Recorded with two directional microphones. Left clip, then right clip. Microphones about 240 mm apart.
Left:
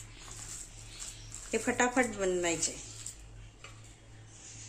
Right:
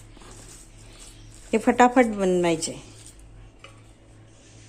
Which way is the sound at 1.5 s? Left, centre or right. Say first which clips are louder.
Right 12 dB; right.